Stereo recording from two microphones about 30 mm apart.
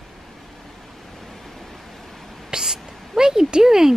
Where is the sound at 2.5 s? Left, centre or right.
Centre.